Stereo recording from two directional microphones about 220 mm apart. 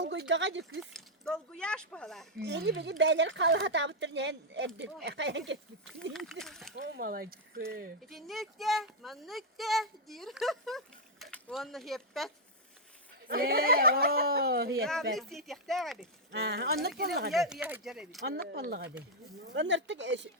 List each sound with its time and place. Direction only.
0.0 s speech: 55° right (ahead or behind)
0.8 s speech: centre (ahead or behind)
2.4 s a woman's voice: 50° right (ahead or behind)
6.1 s speech: centre (ahead or behind)
6.7 s speech: 50° right (ahead or behind)
8.1 s speech: centre (ahead or behind)
13.2 s a woman's voice: 45° right (ahead or behind)
15.1 s speech: centre (ahead or behind)
16.3 s a woman's voice: 50° right (ahead or behind)
17.3 s speech: centre (ahead or behind)
18.3 s a woman's voice: 45° right (ahead or behind)